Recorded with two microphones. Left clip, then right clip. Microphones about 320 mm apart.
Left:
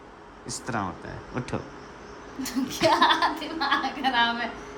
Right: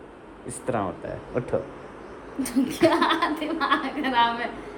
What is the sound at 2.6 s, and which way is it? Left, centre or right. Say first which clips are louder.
A woman's voice: left 1 dB; centre.